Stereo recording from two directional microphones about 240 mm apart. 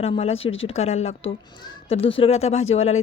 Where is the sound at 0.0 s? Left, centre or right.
Left.